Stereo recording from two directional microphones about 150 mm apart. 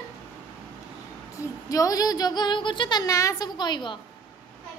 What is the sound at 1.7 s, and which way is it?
A woman's voice, 25° left (ahead or behind).